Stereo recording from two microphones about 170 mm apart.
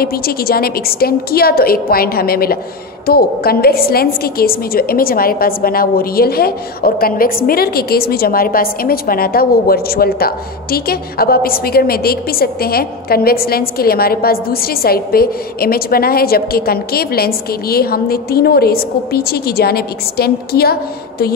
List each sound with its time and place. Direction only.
0.0 s a woman's voice: 65° left (ahead or behind)